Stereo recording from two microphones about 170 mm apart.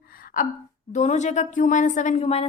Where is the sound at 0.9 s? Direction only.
45° left (ahead or behind).